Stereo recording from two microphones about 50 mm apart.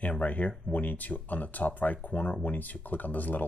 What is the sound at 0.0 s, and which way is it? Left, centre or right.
Speech, left.